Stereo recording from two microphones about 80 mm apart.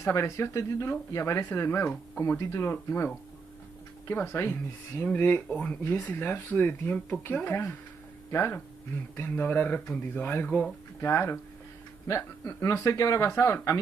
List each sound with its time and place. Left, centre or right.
0.0 s speech: left
4.1 s speech: left
11.0 s speech: left